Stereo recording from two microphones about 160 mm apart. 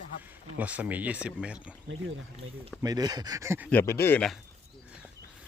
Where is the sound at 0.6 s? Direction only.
10° right (ahead or behind).